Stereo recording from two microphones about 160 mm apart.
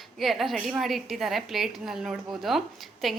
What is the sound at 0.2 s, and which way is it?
A woman's voice, centre (ahead or behind).